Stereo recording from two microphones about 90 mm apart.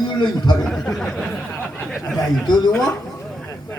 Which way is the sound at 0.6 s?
5° left (ahead or behind).